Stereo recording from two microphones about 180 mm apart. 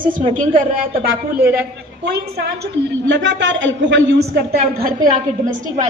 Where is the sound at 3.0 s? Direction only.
85° right; by 4.9 s 60° right (ahead or behind).